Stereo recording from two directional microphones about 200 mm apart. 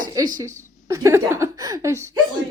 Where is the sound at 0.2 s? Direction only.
15° right (ahead or behind).